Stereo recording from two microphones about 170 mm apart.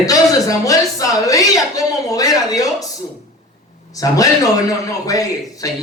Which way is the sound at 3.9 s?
20° left (ahead or behind).